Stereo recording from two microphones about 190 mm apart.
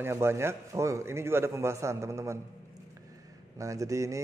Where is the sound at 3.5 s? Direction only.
15° right (ahead or behind).